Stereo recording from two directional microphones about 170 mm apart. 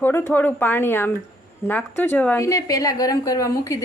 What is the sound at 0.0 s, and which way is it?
Speech, 10° left (ahead or behind).